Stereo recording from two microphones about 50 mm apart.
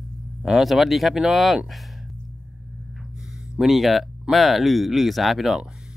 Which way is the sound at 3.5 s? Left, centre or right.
Centre.